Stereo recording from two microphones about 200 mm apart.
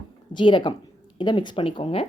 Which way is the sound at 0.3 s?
25° left (ahead or behind).